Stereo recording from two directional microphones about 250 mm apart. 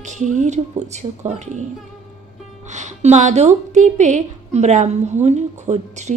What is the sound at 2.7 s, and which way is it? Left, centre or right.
A woman's voice, right.